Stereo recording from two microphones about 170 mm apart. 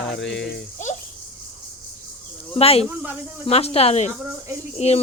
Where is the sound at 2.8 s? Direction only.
10° right (ahead or behind).